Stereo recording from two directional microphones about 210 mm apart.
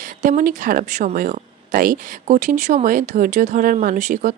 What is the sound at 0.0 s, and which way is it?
Speech, 40° right (ahead or behind).